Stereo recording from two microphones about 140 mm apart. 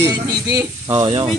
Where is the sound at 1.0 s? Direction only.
40° right (ahead or behind).